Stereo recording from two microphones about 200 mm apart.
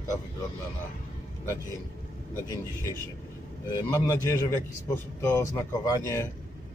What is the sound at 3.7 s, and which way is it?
Speech, 15° left (ahead or behind).